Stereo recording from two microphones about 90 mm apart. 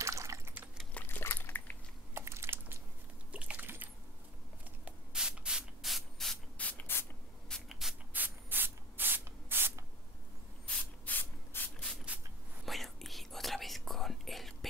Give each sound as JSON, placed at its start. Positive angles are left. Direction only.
{"t": 0.0, "sound": "typing", "side_deg": -35}
{"t": 0.9, "sound": "a sound", "side_deg": 20}
{"t": 2.1, "sound": "typing", "side_deg": -30}
{"t": 3.3, "sound": "a sound", "side_deg": -15}
{"t": 4.8, "sound": "spray", "side_deg": -10}
{"t": 6.6, "sound": "spray", "side_deg": 20}
{"t": 7.4, "sound": "spray", "side_deg": 5}
{"t": 8.1, "sound": "spray", "side_deg": -20}
{"t": 10.8, "sound": "spray", "side_deg": 20}
{"t": 12.6, "sound": "whispering", "side_deg": 0}